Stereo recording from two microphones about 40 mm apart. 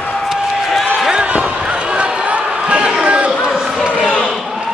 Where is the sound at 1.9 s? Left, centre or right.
Right.